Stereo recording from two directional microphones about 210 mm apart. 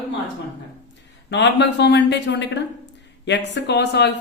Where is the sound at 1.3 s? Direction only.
55° left (ahead or behind).